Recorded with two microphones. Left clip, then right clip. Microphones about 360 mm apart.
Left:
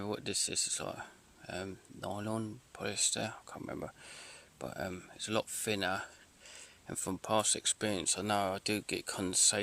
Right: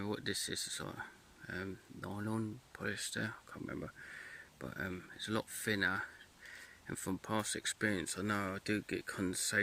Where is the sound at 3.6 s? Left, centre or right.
Left.